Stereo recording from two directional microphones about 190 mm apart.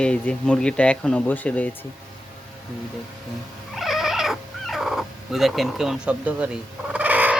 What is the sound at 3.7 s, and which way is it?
Cat, centre (ahead or behind).